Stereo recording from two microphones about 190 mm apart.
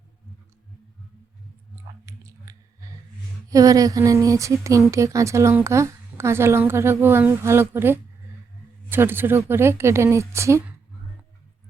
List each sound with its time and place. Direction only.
1.7 s chewing: 15° right (ahead or behind)
3.5 s a woman's voice: 20° right (ahead or behind)